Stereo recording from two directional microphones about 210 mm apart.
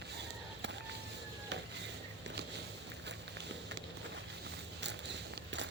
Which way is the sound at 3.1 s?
55° right (ahead or behind).